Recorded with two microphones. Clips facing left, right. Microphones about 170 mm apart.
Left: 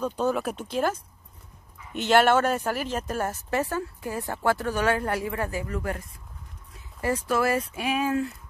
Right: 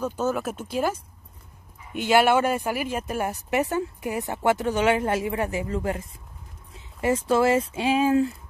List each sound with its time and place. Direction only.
0.0 s speech: 5° right (ahead or behind); by 8.4 s 25° right (ahead or behind)